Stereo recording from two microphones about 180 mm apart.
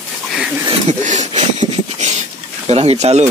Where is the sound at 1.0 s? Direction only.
40° right (ahead or behind).